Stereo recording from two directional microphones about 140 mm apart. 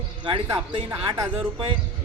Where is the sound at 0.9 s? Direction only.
25° right (ahead or behind).